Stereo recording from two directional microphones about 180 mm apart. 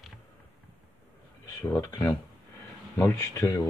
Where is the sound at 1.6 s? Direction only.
15° left (ahead or behind).